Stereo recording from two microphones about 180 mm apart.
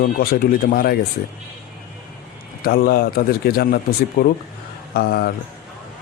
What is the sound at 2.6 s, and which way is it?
A man's voice, 55° left (ahead or behind).